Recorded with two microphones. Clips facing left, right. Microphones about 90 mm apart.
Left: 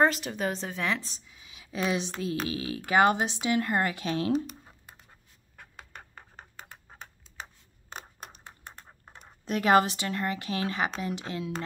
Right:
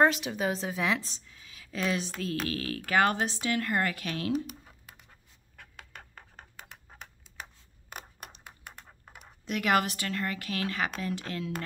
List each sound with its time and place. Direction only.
0.0 s a woman's voice: centre (ahead or behind); by 4.4 s 25° left (ahead or behind)
5.6 s a sound: 5° left (ahead or behind)
7.9 s clapping: 30° left (ahead or behind)
9.1 s speech: 35° left (ahead or behind)